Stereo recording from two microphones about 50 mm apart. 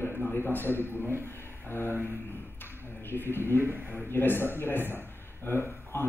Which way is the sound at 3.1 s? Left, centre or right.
Left.